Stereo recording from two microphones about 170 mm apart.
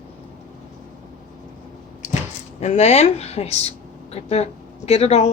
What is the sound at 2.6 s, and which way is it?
Speech, 40° left (ahead or behind).